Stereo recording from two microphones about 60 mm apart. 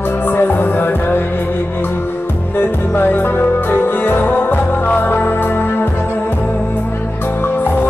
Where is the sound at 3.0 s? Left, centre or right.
Left.